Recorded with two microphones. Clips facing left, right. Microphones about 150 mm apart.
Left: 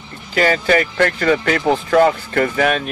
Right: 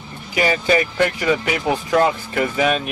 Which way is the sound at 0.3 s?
15° right (ahead or behind).